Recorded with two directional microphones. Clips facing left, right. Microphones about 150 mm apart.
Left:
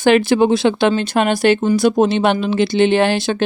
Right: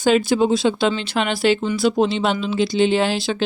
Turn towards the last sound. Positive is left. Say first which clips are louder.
# left 4 dB
turn(degrees=60)  # may be behind; listen again after turning